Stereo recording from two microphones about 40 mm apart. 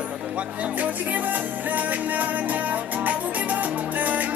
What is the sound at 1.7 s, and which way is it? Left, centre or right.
Music, right.